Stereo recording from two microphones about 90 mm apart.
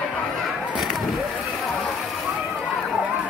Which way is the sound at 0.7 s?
Centre (ahead or behind).